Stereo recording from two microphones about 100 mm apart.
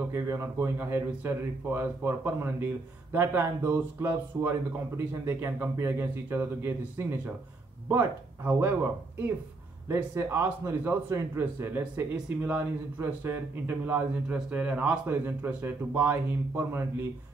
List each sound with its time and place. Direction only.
0.1 s a man's voice: 30° right (ahead or behind)
9.8 s a man's voice: 25° right (ahead or behind)